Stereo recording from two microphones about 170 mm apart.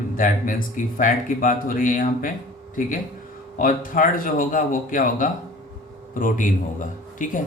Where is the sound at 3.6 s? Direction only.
50° left (ahead or behind).